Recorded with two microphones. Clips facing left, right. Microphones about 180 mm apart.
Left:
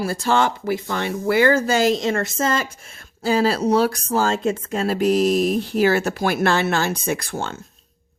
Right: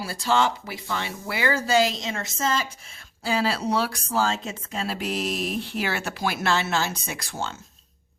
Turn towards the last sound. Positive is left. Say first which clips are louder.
# left 8 dB
turn(degrees=55)  # may be behind; listen again after turning